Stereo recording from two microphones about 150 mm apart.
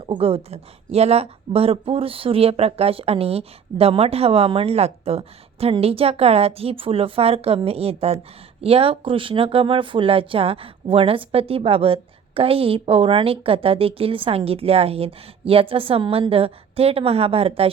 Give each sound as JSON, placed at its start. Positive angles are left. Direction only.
{"t": 0.1, "sound": "a woman's voice", "side_deg": -40}